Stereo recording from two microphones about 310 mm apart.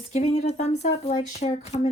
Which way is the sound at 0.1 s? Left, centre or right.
Left.